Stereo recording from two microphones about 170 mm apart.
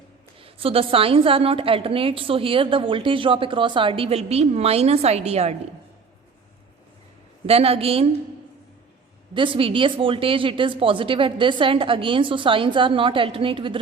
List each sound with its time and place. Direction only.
0.4 s a woman's voice: 35° right (ahead or behind)
7.4 s a woman's voice: 35° right (ahead or behind)
9.3 s a woman's voice: 30° right (ahead or behind)